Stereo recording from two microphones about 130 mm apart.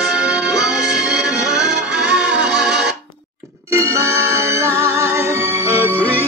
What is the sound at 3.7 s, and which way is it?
Music, 20° right (ahead or behind).